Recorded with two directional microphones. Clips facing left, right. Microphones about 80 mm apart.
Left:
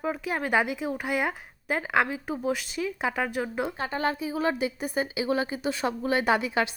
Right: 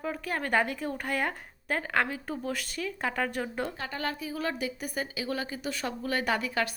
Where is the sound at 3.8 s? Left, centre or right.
Left.